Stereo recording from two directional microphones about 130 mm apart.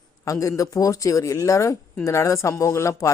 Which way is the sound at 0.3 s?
25° left (ahead or behind).